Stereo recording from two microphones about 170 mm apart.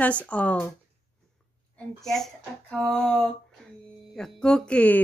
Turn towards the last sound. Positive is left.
turn(degrees=5)  # may be behind; listen again after turning